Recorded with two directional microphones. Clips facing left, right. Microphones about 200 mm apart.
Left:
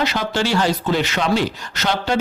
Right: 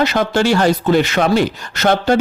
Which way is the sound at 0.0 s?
50° right (ahead or behind).